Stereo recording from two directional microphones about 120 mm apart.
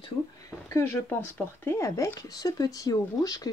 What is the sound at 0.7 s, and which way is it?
Speech, 25° left (ahead or behind).